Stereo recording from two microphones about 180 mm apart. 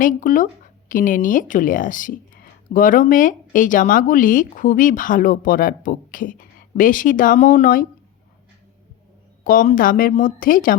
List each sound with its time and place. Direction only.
0.0 s speech: 50° left (ahead or behind)
9.4 s speech: 50° left (ahead or behind)